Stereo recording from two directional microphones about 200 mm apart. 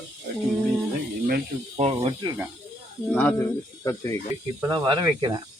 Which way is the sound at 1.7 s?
30° right (ahead or behind).